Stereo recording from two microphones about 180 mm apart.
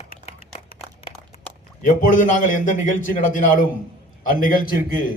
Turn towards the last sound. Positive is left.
turn(degrees=50)  # may be behind; listen again after turning